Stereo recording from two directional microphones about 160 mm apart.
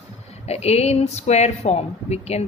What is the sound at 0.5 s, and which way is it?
Speech, 40° left (ahead or behind).